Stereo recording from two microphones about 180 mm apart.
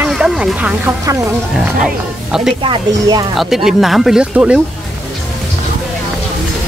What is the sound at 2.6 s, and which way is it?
Speech, 25° right (ahead or behind).